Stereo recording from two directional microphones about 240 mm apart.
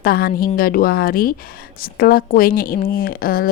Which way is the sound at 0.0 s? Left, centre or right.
Left.